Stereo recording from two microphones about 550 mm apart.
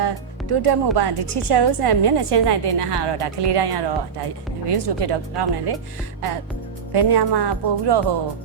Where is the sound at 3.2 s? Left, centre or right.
Right.